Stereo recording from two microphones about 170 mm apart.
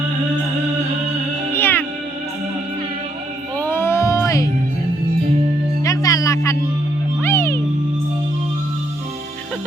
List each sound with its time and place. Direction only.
1.5 s music: 10° left (ahead or behind)
3.6 s music: 15° left (ahead or behind)
5.8 s music: 20° left (ahead or behind)